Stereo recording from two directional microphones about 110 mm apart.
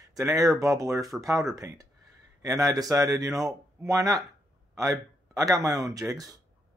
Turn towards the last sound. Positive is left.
turn(degrees=-35)  # may be behind; listen again after turning